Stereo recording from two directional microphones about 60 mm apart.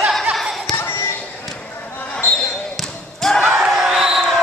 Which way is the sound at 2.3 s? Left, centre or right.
Centre.